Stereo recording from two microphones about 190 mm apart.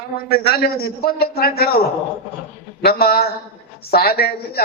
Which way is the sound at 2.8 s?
55° left (ahead or behind).